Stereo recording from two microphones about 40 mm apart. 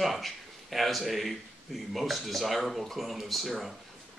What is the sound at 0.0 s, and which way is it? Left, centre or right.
Speech, centre.